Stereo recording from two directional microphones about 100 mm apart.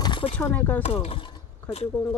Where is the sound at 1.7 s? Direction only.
15° left (ahead or behind).